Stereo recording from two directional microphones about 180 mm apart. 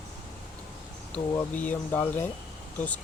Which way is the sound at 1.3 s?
10° left (ahead or behind).